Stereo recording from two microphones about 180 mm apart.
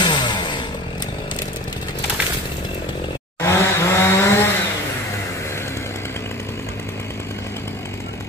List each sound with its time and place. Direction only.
0.0 s chainsaw: 25° left (ahead or behind)
3.4 s chainsaw: 15° left (ahead or behind)